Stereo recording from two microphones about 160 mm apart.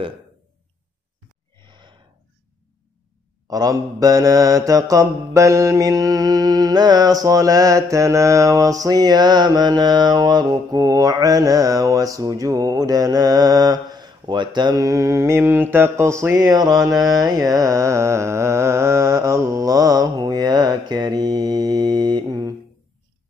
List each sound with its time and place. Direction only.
3.4 s mantra: 25° right (ahead or behind)